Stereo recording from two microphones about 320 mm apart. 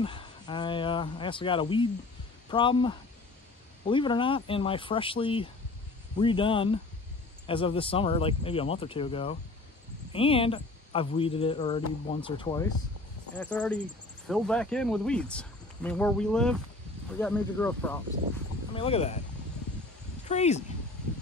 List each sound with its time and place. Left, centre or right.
0.0 s speech: centre
18.7 s speech: centre
20.2 s speech: left